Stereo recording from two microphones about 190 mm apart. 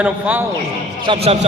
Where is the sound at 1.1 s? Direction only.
30° right (ahead or behind).